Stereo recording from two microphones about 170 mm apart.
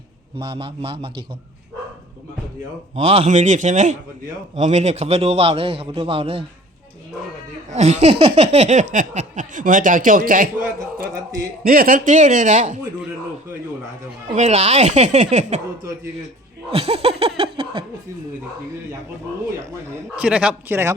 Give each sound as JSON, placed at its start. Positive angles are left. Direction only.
{"t": 0.6, "sound": "a man's voice", "side_deg": -35}
{"t": 2.9, "sound": "a man's voice", "side_deg": -35}
{"t": 7.7, "sound": "a man's voice", "side_deg": -40}
{"t": 14.3, "sound": "a man's voice", "side_deg": -40}
{"t": 16.7, "sound": "a man's voice", "side_deg": -35}
{"t": 19.9, "sound": "a man's voice", "side_deg": -5}